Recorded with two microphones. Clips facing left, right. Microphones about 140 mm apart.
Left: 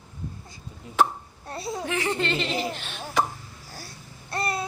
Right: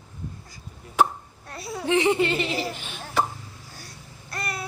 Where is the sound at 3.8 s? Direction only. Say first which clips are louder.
Left 2 dB; 30° left (ahead or behind).